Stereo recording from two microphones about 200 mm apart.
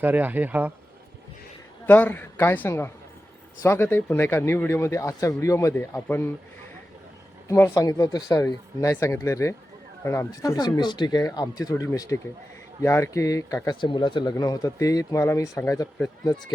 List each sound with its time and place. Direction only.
0.0 s speech: 10° right (ahead or behind)
1.9 s speech: 10° left (ahead or behind)
7.4 s speech: 15° left (ahead or behind)